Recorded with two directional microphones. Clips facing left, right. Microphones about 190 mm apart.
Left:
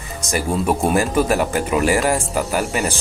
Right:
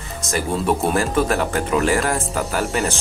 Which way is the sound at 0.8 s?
10° left (ahead or behind).